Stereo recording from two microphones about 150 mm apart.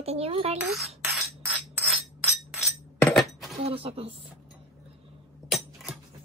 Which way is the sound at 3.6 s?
40° right (ahead or behind).